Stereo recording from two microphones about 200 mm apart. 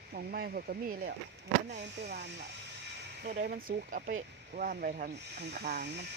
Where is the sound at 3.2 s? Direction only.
45° right (ahead or behind).